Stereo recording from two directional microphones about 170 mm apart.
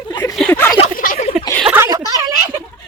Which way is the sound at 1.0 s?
55° left (ahead or behind).